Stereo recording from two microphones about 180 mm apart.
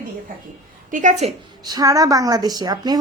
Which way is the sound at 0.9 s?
45° right (ahead or behind).